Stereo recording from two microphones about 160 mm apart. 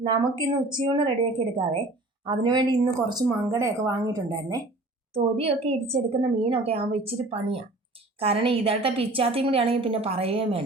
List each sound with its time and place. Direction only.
0.0 s speech: 25° right (ahead or behind)
5.1 s a woman's voice: 40° right (ahead or behind)